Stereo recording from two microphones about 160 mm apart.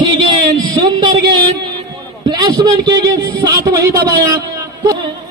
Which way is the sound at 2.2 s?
25° right (ahead or behind).